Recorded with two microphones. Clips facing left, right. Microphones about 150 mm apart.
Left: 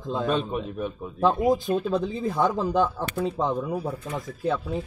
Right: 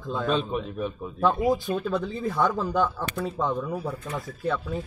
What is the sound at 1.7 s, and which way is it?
A man's voice, 25° left (ahead or behind).